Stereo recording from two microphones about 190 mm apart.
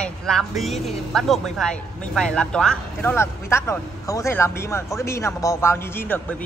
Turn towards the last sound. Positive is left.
turn(degrees=10)  # may be behind; listen again after turning